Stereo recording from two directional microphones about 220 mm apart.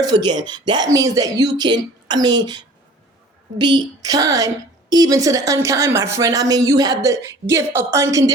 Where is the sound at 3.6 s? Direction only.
20° right (ahead or behind).